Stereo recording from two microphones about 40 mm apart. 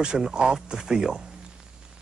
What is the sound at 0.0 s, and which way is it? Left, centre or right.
Speech, centre.